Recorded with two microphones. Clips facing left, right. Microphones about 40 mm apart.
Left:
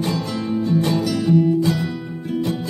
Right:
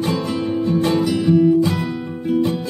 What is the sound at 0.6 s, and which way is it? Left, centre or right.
Music, right.